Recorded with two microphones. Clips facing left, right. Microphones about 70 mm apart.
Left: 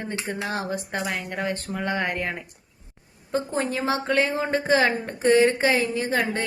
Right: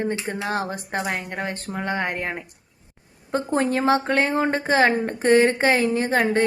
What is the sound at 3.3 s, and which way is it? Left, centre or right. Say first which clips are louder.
Speech: right 4 dB; right.